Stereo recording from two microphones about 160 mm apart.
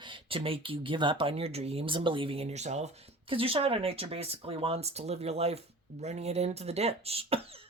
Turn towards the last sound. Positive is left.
turn(degrees=-40)  # may be behind; listen again after turning